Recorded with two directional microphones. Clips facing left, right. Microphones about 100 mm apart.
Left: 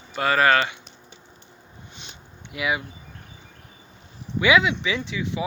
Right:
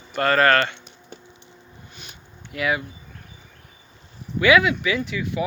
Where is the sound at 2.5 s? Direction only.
15° left (ahead or behind).